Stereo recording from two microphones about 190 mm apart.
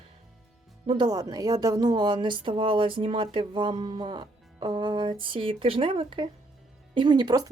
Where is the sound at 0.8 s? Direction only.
25° right (ahead or behind).